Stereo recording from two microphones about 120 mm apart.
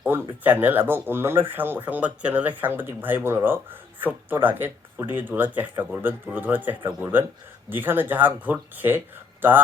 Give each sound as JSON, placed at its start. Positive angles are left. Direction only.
{"t": 0.4, "sound": "speech", "side_deg": -15}